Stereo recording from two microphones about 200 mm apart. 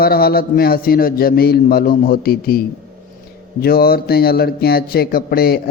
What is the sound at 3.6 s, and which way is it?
Speech, 50° left (ahead or behind).